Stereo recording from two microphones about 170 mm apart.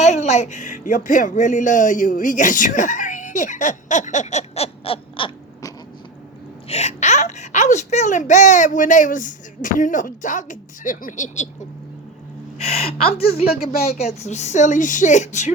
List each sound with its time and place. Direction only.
0.0 s speech: 40° left (ahead or behind)
6.7 s a child's voice: 40° left (ahead or behind)
12.6 s a woman's voice: 35° left (ahead or behind)
13.7 s speech: 60° left (ahead or behind)
14.0 s a child's voice: 40° left (ahead or behind)